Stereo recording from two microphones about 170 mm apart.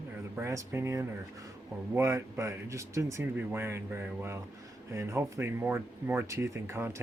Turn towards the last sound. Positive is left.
turn(degrees=-15)  # may be behind; listen again after turning